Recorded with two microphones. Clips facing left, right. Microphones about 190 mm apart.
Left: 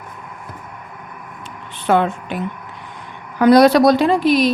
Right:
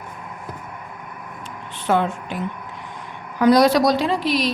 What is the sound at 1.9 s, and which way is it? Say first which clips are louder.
Speech: left 4 dB; 65° left (ahead or behind).